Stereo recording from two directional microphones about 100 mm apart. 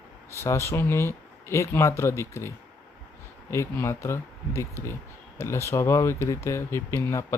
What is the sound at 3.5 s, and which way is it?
Speech, 25° left (ahead or behind).